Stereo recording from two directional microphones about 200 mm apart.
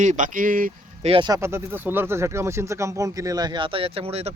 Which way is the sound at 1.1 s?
20° right (ahead or behind).